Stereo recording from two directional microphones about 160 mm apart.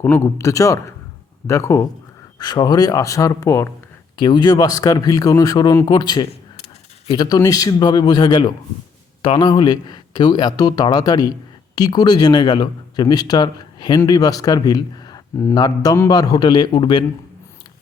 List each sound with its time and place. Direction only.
0.0 s a man's voice: 15° left (ahead or behind)